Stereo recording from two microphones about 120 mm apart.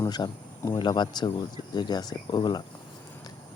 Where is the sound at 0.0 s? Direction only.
35° left (ahead or behind).